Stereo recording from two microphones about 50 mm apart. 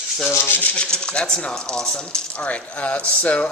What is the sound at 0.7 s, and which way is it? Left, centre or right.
Speech, centre.